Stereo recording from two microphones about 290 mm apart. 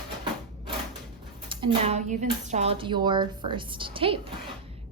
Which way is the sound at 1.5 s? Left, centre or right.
Centre.